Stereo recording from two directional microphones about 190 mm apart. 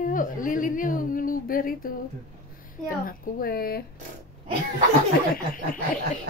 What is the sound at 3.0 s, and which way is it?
Speech, 50° left (ahead or behind).